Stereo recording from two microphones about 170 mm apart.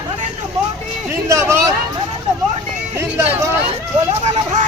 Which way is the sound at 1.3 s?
20° right (ahead or behind).